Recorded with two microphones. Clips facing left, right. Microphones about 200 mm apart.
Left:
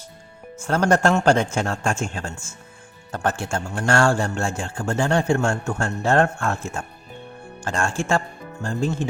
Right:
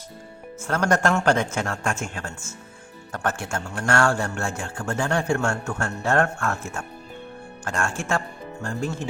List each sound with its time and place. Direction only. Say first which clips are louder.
0.7 s a man's voice: left 3 dB; 30° left (ahead or behind)
7.6 s a man's voice: left 3 dB; 25° left (ahead or behind)